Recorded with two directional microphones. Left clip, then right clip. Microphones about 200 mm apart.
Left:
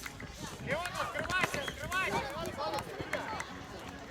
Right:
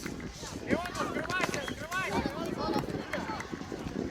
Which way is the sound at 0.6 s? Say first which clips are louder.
Right 2 dB; 55° left (ahead or behind).